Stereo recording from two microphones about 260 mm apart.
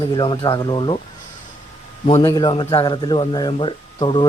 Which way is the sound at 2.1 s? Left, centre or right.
Centre.